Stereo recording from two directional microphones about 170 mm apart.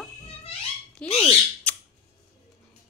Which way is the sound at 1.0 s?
35° left (ahead or behind).